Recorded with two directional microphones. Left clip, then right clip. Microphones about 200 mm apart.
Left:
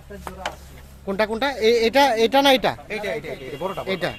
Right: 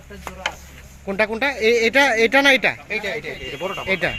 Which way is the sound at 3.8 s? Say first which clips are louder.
Right 7 dB; centre (ahead or behind).